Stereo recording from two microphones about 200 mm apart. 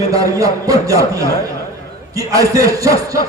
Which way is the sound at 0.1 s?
15° right (ahead or behind).